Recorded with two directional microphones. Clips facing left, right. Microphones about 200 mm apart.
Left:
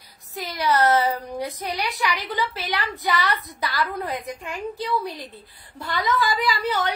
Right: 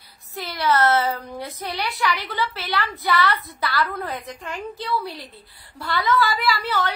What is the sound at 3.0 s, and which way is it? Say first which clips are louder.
A woman's voice: right 3 dB; 15° left (ahead or behind).